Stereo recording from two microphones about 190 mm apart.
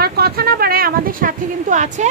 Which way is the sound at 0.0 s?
55° right (ahead or behind).